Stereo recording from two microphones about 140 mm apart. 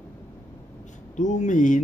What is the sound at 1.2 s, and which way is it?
Speech, 60° left (ahead or behind).